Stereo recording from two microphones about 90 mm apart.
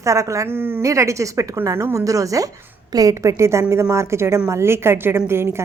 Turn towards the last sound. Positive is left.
turn(degrees=-25)  # may be behind; listen again after turning